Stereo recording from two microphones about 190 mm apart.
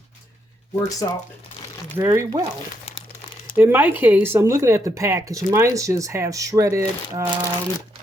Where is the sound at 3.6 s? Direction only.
10° right (ahead or behind).